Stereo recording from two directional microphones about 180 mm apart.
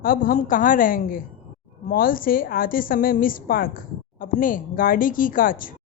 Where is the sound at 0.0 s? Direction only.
50° left (ahead or behind).